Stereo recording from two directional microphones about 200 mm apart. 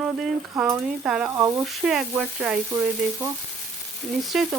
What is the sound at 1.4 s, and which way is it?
Frying, 15° right (ahead or behind).